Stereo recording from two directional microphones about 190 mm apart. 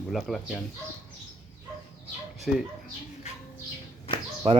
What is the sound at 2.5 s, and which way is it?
Speech, centre (ahead or behind).